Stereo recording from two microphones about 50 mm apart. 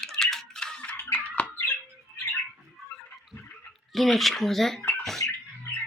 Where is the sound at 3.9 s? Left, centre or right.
Centre.